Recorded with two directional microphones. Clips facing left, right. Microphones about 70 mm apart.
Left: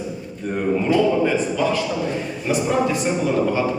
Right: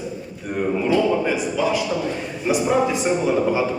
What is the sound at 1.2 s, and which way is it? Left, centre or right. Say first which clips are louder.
Speech: left 2 dB; centre.